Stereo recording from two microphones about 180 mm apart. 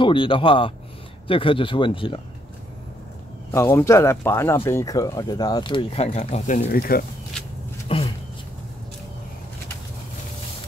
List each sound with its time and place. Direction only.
0.0 s speech: 25° left (ahead or behind)
3.5 s speech: 15° left (ahead or behind)
6.1 s speech: 40° left (ahead or behind)
7.9 s dog: 35° left (ahead or behind)